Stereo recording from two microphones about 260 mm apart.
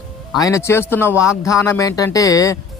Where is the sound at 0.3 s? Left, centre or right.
Centre.